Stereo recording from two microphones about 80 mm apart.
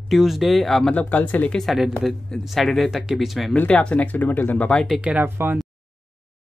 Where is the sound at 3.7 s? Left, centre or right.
Centre.